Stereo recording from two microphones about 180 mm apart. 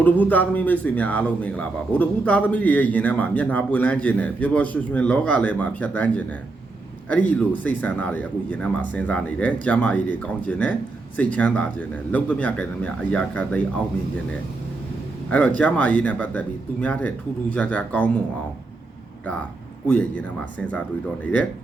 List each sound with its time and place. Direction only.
0.0 s speech: 10° left (ahead or behind)
15.3 s speech: 10° left (ahead or behind)
19.2 s speech: 10° left (ahead or behind)